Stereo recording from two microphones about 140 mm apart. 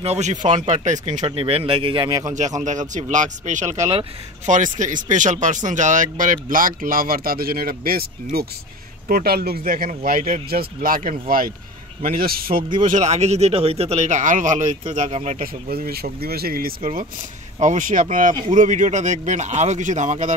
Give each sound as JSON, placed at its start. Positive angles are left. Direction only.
{"t": 0.0, "sound": "speech", "side_deg": -55}
{"t": 1.2, "sound": "speech", "side_deg": -45}
{"t": 2.2, "sound": "speech", "side_deg": -60}
{"t": 11.0, "sound": "speech", "side_deg": -75}
{"t": 12.8, "sound": "speech", "side_deg": -60}
{"t": 15.3, "sound": "speech", "side_deg": -90}
{"t": 17.6, "sound": "speech", "side_deg": -65}